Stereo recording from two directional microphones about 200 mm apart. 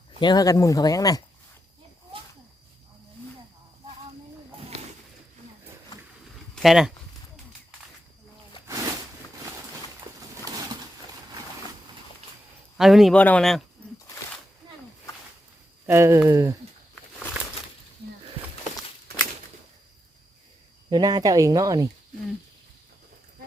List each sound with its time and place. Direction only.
0.2 s speech: 20° left (ahead or behind)
6.6 s speech: centre (ahead or behind)
8.6 s a sound: 15° right (ahead or behind)
10.4 s pigeon: 20° right (ahead or behind)
12.7 s speech: centre (ahead or behind)
15.9 s speech: 15° right (ahead or behind)
20.9 s speech: 20° right (ahead or behind)